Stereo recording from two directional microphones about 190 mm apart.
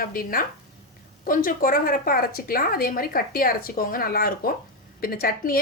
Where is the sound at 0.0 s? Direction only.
50° left (ahead or behind).